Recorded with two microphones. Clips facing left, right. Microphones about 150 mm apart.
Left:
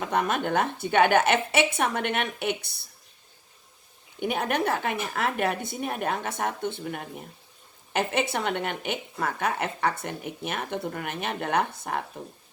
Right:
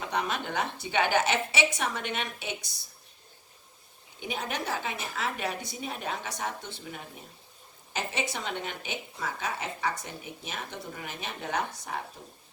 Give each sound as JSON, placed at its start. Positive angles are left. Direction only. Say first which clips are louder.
{"t": 0.0, "sound": "a woman's voice", "louder": "left 6 dB", "side_deg": 50}
{"t": 4.2, "sound": "a woman's voice", "louder": "left 8 dB", "side_deg": 60}